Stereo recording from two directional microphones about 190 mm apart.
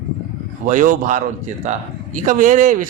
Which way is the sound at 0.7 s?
40° right (ahead or behind).